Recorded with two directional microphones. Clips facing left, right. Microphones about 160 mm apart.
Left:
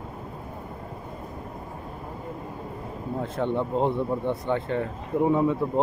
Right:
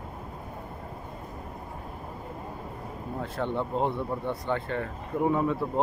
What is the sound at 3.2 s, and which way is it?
Speech, 15° left (ahead or behind).